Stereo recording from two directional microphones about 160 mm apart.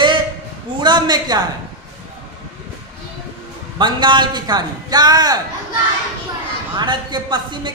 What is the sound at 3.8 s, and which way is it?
A man's voice, 30° right (ahead or behind).